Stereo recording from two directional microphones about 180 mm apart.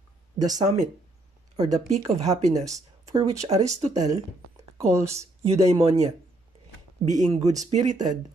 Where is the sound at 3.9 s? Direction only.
20° right (ahead or behind).